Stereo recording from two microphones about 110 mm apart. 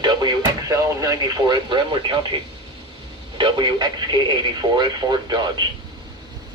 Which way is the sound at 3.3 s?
45° right (ahead or behind).